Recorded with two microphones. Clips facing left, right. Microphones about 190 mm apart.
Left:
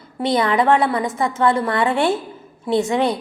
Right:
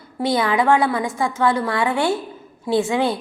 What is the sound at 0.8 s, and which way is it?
A woman's voice, 20° left (ahead or behind).